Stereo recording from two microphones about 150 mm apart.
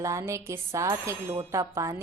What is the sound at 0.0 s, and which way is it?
A woman's voice, 20° right (ahead or behind).